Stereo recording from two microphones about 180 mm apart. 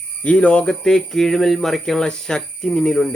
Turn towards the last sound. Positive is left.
turn(degrees=5)  # may be behind; listen again after turning